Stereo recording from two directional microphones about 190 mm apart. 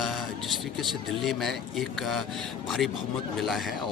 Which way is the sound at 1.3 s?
Centre (ahead or behind).